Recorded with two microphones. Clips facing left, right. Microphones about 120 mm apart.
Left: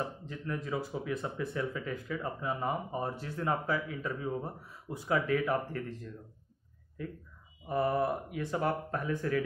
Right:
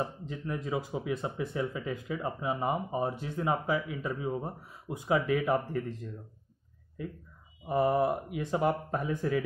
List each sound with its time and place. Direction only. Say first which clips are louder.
0.3 s speech: right 2 dB; 20° right (ahead or behind)
7.6 s speech: right 3 dB; 20° right (ahead or behind)